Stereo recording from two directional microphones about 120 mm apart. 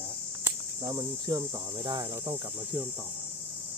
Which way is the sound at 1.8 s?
45° right (ahead or behind).